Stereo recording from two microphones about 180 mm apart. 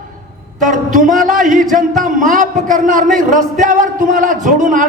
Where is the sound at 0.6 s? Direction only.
45° right (ahead or behind).